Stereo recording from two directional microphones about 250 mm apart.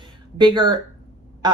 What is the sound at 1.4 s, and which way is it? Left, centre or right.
Quack, centre.